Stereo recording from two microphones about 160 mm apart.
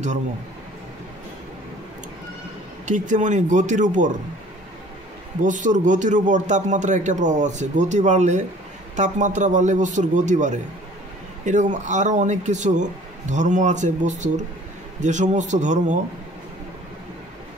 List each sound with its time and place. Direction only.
2.8 s a man's voice: 50° right (ahead or behind)
5.4 s a man's voice: 50° right (ahead or behind)